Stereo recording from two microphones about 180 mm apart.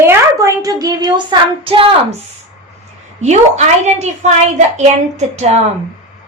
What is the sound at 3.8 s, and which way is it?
A woman's voice, 40° right (ahead or behind).